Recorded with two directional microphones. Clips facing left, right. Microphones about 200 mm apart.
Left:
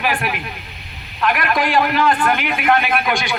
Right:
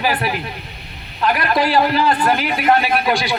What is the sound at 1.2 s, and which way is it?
A man's voice, 30° right (ahead or behind).